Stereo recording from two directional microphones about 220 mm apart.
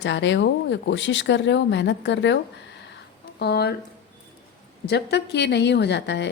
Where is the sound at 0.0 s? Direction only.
55° left (ahead or behind).